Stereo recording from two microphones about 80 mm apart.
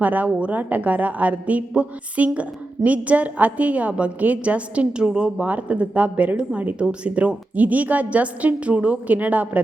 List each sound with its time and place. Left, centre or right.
0.0 s a woman's voice: centre